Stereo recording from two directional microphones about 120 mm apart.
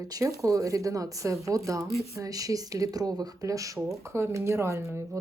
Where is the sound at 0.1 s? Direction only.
30° right (ahead or behind).